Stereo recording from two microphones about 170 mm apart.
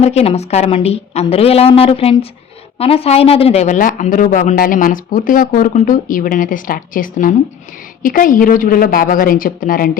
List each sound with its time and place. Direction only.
0.0 s a woman's voice: 40° left (ahead or behind); by 10.0 s 55° left (ahead or behind)